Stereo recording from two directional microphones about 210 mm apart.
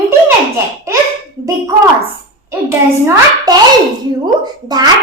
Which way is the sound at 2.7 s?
15° right (ahead or behind).